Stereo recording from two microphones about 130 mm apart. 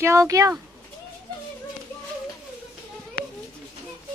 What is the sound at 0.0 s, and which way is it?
Speech, 20° right (ahead or behind).